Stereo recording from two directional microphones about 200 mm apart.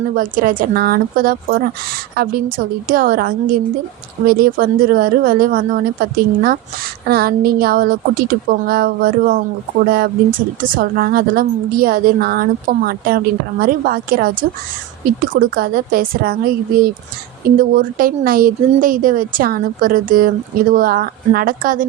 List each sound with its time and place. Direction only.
0.2 s speech: 45° right (ahead or behind)